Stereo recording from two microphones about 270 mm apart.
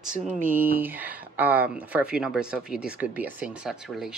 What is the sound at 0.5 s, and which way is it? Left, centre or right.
Speech, centre.